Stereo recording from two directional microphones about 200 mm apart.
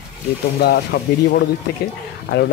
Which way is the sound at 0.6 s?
50° left (ahead or behind).